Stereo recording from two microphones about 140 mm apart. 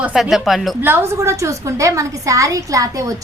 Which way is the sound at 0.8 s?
20° right (ahead or behind).